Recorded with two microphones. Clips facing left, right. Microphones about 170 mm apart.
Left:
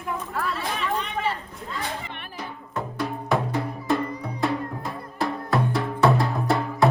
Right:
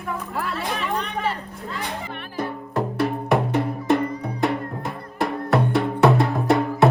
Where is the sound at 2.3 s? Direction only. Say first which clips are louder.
Right 8 dB; 60° right (ahead or behind).